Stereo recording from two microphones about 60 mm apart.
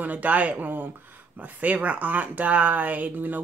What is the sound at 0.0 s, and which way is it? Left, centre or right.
Speech, right.